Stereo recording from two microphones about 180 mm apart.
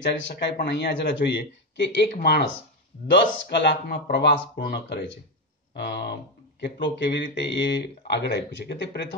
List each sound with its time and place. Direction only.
0.0 s speech: 80° left
3.1 s speech: 75° left (ahead or behind)
5.8 s speech: 65° left (ahead or behind)